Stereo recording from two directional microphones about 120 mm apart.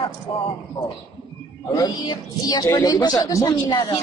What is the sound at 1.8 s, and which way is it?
Speech, 35° left (ahead or behind).